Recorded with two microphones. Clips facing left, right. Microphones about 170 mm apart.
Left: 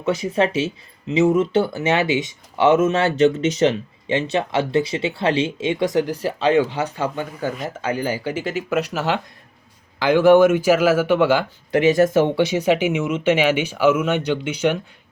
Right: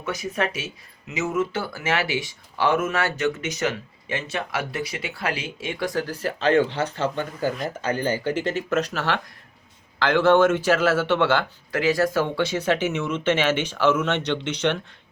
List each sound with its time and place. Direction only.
0.0 s speech: 25° left (ahead or behind)
11.7 s speech: 25° left (ahead or behind)